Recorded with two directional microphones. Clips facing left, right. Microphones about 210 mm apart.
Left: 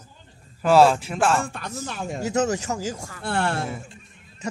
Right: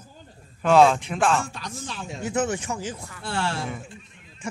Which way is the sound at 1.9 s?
60° left (ahead or behind).